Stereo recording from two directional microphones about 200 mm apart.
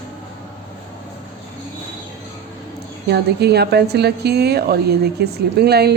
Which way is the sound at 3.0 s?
55° right (ahead or behind).